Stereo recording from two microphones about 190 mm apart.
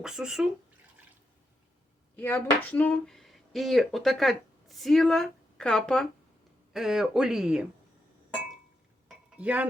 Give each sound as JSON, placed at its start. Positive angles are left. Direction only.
{"t": 0.0, "sound": "speech", "side_deg": -5}
{"t": 2.1, "sound": "speech", "side_deg": 10}
{"t": 9.0, "sound": "cutlery", "side_deg": -5}